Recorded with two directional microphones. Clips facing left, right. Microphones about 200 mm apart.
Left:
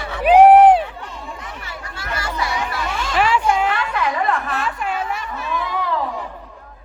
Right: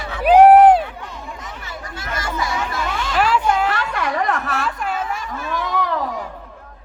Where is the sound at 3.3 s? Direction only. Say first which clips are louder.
Even; 5° left (ahead or behind).